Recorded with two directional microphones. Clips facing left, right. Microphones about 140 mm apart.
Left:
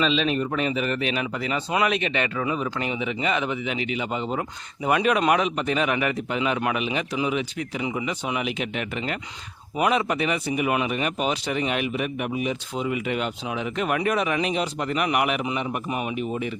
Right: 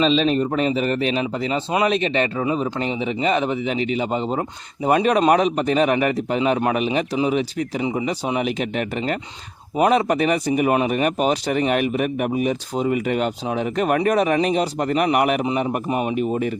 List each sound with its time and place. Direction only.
0.0 s speech: 35° right (ahead or behind)